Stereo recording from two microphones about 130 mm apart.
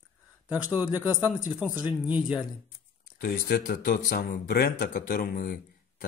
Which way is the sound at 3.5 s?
90° left.